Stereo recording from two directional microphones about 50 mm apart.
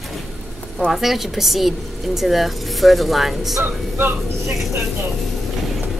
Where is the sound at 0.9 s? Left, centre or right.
Centre.